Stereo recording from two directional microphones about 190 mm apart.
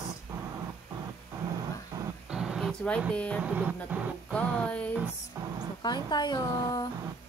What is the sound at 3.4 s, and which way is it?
Speech, 5° right (ahead or behind).